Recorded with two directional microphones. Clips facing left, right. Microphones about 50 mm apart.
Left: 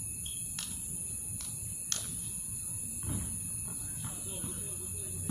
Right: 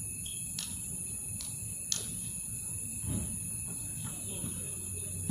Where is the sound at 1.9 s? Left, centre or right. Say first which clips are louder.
Even; left.